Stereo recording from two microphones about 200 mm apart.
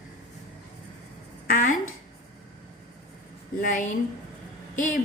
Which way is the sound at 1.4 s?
40° left (ahead or behind).